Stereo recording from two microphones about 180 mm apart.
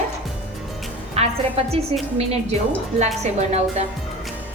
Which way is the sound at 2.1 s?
35° right (ahead or behind).